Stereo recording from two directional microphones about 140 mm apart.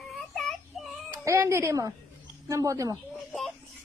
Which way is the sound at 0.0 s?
Centre (ahead or behind).